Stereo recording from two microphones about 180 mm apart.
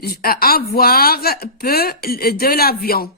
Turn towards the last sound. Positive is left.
turn(degrees=55)  # may be behind; listen again after turning